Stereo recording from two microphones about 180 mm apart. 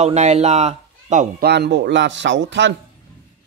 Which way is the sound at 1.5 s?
70° right (ahead or behind).